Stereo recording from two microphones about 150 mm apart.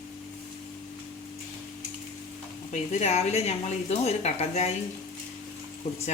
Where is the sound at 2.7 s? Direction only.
45° left (ahead or behind).